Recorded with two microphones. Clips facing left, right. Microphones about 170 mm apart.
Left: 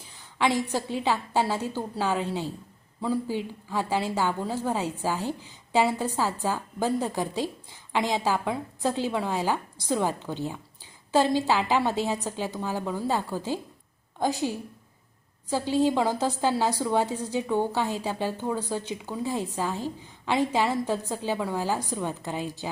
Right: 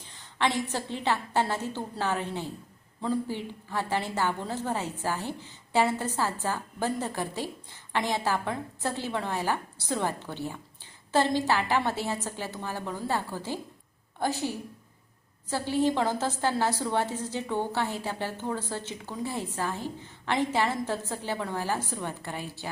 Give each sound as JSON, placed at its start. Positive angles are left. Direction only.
{"t": 0.0, "sound": "a woman's voice", "side_deg": 10}